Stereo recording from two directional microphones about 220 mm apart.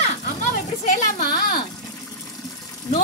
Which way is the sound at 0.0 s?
35° left (ahead or behind).